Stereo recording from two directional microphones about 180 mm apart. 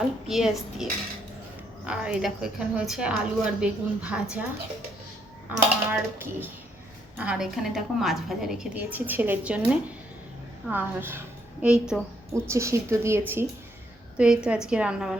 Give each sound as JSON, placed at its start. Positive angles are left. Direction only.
{"t": 0.3, "sound": "a woman's voice", "side_deg": 0}
{"t": 1.9, "sound": "a woman's voice", "side_deg": -5}
{"t": 5.5, "sound": "a woman's voice", "side_deg": -10}
{"t": 7.2, "sound": "a woman's voice", "side_deg": -5}
{"t": 12.3, "sound": "a woman's voice", "side_deg": -15}